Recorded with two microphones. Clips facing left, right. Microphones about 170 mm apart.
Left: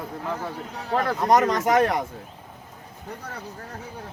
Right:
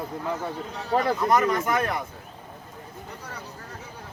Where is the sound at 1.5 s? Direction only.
75° left (ahead or behind).